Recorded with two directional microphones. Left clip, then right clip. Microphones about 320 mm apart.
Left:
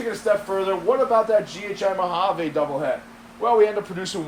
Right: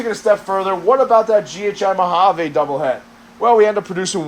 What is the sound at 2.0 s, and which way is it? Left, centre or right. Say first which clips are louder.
A man's voice: right 8 dB; right.